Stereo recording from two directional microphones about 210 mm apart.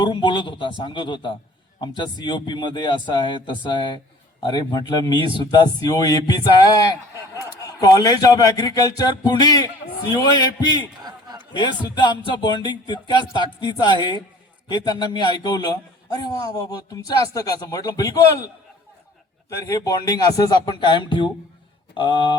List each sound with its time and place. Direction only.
0.0 s a man's voice: 20° left (ahead or behind)
11.0 s a sound: 20° right (ahead or behind)
11.5 s a man's voice: 20° left (ahead or behind)
19.5 s a man's voice: 15° left (ahead or behind)